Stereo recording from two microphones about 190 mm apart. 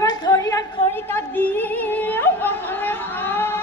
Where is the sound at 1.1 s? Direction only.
10° left (ahead or behind).